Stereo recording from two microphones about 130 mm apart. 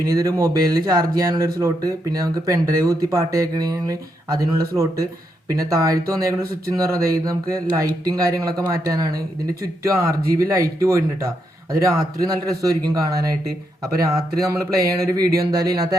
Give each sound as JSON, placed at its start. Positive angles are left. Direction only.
{"t": 0.0, "sound": "speech", "side_deg": -25}